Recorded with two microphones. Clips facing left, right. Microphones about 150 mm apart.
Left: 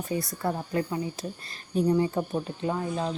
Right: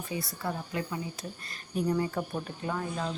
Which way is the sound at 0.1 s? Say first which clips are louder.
Left 5 dB; 45° left (ahead or behind).